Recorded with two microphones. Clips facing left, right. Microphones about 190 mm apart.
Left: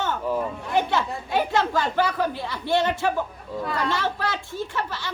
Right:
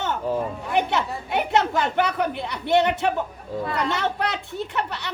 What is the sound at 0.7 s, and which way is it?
Speech, 20° right (ahead or behind).